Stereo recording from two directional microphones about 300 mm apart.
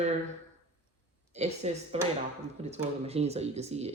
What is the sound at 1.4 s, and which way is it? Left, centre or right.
Speech, right.